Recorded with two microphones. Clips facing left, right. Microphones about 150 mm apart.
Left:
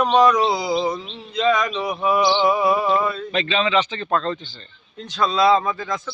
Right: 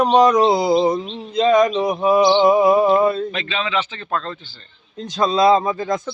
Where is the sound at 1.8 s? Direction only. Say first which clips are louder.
Right 5 dB; 20° right (ahead or behind).